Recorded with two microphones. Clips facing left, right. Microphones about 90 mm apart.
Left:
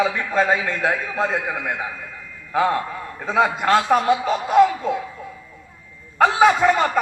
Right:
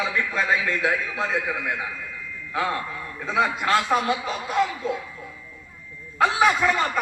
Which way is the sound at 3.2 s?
40° left (ahead or behind).